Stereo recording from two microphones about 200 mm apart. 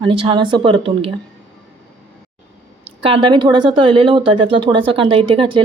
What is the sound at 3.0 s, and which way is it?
Speech, 25° right (ahead or behind).